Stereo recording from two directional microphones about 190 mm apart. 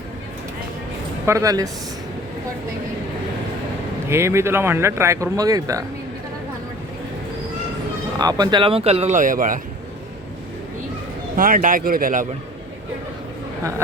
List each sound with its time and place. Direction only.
1.3 s speech: 15° right (ahead or behind)
4.1 s speech: 15° right (ahead or behind)
8.2 s speech: 20° right (ahead or behind); by 9.6 s 45° right (ahead or behind)
11.3 s speech: 45° right (ahead or behind)